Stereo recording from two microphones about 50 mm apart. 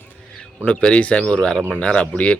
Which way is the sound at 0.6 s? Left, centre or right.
Left.